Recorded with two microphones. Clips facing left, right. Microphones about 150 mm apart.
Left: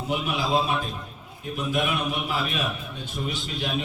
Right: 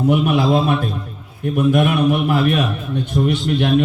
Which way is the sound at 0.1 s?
60° right (ahead or behind).